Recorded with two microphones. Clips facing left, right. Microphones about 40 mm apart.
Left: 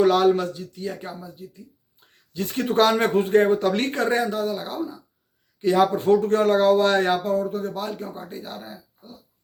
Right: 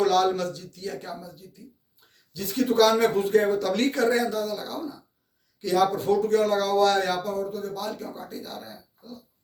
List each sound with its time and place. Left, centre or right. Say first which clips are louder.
0.0 s speech: left 4 dB; left
2.3 s speech: left 1 dB; left